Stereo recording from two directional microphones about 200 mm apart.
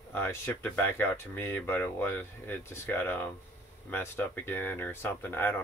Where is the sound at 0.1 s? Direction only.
10° left (ahead or behind).